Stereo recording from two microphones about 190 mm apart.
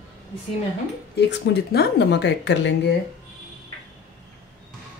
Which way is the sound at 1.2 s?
60° left (ahead or behind).